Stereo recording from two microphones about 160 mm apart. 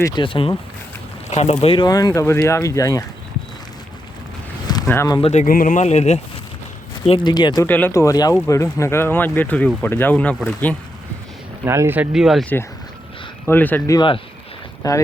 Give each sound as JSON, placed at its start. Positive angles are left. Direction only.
{"t": 0.0, "sound": "speech", "side_deg": 30}
{"t": 1.3, "sound": "speech", "side_deg": 40}
{"t": 4.6, "sound": "a sound", "side_deg": 25}
{"t": 5.2, "sound": "speech", "side_deg": 45}
{"t": 5.5, "sound": "speech", "side_deg": 55}
{"t": 7.3, "sound": "speech", "side_deg": 25}
{"t": 7.7, "sound": "speech", "side_deg": 15}
{"t": 11.6, "sound": "speech", "side_deg": -15}
{"t": 13.5, "sound": "speech", "side_deg": 10}